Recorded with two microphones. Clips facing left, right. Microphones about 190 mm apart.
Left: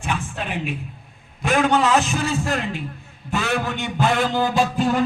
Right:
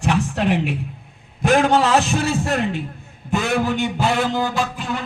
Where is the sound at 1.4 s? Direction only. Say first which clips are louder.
Right 3 dB; 45° right (ahead or behind).